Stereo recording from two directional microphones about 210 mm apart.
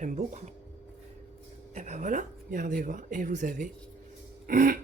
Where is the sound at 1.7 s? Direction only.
35° right (ahead or behind).